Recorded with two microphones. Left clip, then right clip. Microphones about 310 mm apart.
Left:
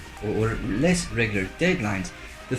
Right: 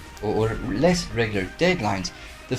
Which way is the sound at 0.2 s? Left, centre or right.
Right.